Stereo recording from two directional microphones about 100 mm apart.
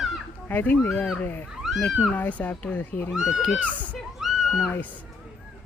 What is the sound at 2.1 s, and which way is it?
Speech, 15° left (ahead or behind).